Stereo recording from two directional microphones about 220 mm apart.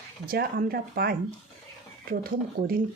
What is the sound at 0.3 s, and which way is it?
Speech, 45° right (ahead or behind).